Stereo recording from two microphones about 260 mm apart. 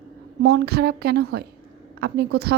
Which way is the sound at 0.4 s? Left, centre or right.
Right.